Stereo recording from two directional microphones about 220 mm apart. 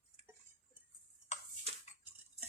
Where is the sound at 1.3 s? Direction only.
30° left (ahead or behind).